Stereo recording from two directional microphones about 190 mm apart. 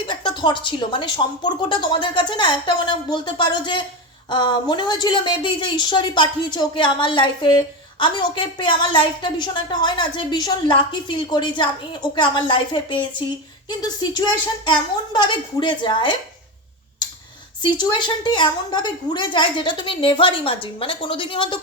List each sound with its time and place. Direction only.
0.0 s a woman's voice: 25° left (ahead or behind)
17.6 s a woman's voice: 25° left (ahead or behind)